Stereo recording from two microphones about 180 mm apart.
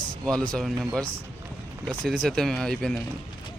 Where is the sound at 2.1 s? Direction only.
Centre (ahead or behind).